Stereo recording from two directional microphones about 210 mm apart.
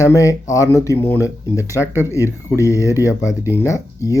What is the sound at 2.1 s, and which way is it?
Speech, 15° left (ahead or behind).